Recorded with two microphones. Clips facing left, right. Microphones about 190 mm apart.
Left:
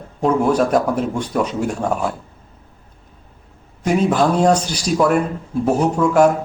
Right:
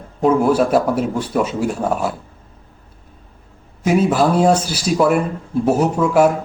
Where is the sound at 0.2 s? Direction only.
5° right (ahead or behind).